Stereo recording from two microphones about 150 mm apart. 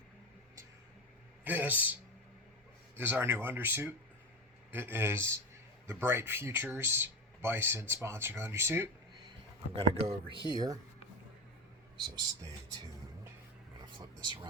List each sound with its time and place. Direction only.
1.5 s speech: 10° right (ahead or behind)
9.7 s speech: 35° right (ahead or behind)
11.9 s speech: 30° right (ahead or behind)